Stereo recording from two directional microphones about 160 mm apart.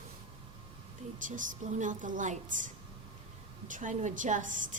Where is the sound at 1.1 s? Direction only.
55° right (ahead or behind).